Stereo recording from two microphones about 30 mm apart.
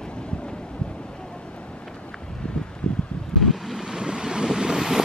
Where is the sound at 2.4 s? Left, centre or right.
Left.